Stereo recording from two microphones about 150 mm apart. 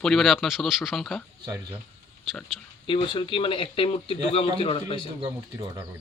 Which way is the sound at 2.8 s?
35° left (ahead or behind).